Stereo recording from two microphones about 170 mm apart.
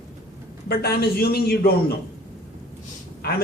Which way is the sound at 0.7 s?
65° left (ahead or behind).